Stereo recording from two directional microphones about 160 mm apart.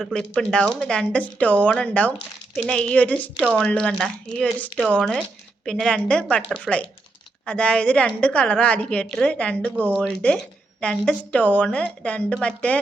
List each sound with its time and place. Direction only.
0.0 s speech: 5° left (ahead or behind)
9.7 s speech: 10° right (ahead or behind)
10.2 s speech: 5° left (ahead or behind)